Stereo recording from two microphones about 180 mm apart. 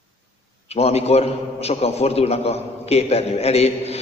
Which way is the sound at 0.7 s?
35° left (ahead or behind).